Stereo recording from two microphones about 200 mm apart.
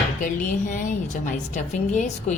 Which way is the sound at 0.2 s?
40° left (ahead or behind).